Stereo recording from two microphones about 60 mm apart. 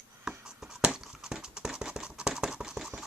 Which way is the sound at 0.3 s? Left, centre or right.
Centre.